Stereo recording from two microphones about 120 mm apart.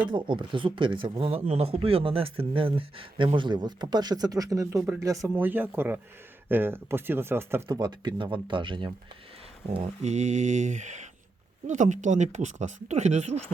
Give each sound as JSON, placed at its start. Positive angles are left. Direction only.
{"t": 0.1, "sound": "speech", "side_deg": -40}
{"t": 1.5, "sound": "speech", "side_deg": -60}
{"t": 5.3, "sound": "speech", "side_deg": -15}
{"t": 7.7, "sound": "speech", "side_deg": -35}
{"t": 9.6, "sound": "speech", "side_deg": -65}